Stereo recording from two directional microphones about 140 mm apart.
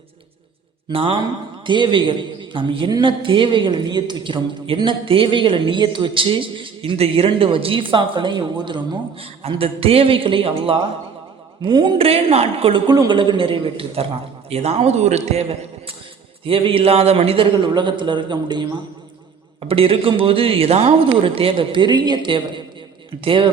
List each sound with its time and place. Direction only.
0.9 s a man's voice: 40° right (ahead or behind)
12.9 s a man's voice: 30° right (ahead or behind)
19.6 s a man's voice: 40° right (ahead or behind)